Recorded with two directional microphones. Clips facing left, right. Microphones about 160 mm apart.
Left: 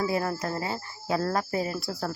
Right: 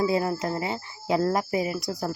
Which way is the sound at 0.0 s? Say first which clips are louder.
Right 3 dB; 20° right (ahead or behind).